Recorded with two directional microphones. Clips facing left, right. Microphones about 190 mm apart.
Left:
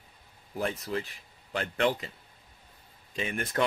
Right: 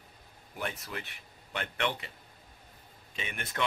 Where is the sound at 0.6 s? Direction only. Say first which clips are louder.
Left 7 dB; 30° left (ahead or behind).